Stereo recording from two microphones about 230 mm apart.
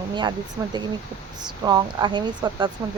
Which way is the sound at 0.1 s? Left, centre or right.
Centre.